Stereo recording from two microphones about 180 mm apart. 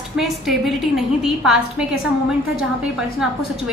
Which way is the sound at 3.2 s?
5° right (ahead or behind).